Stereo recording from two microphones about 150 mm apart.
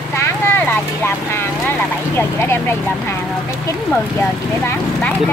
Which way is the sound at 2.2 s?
15° left (ahead or behind).